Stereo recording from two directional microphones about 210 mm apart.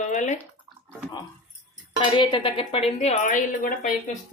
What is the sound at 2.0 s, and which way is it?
Speech, 20° left (ahead or behind).